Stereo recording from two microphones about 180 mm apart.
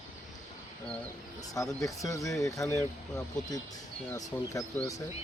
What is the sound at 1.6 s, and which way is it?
Speech, 20° left (ahead or behind).